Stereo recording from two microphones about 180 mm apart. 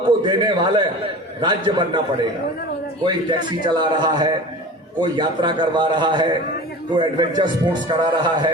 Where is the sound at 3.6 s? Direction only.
25° right (ahead or behind).